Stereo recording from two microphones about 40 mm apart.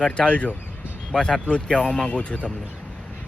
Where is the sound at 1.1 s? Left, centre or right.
Centre.